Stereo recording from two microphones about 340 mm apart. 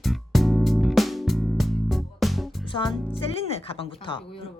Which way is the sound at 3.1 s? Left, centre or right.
Centre.